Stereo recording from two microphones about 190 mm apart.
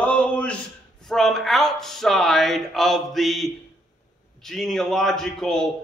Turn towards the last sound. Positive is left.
turn(degrees=0)  # may be behind; listen again after turning